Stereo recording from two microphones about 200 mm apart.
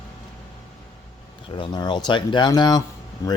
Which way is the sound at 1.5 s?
25° left (ahead or behind).